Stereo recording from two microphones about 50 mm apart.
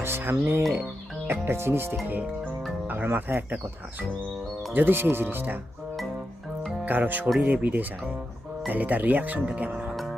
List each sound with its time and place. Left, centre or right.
0.0 s music: right
1.3 s speech: right
2.8 s speech: right
4.7 s speech: right
6.8 s speech: right
9.9 s music: centre